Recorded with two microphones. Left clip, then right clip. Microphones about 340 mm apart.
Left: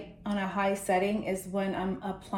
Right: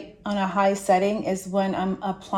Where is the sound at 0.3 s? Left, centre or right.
Right.